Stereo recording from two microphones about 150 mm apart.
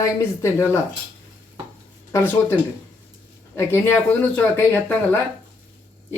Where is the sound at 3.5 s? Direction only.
15° left (ahead or behind).